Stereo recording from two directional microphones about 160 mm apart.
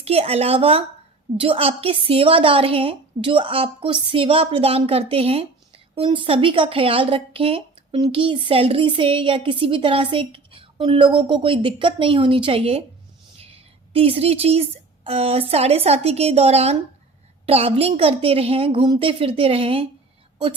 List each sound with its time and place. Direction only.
0.0 s a woman's voice: 40° right (ahead or behind)
13.9 s a woman's voice: 40° right (ahead or behind)